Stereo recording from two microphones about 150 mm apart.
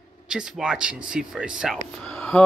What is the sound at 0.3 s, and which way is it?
Speech, 5° right (ahead or behind).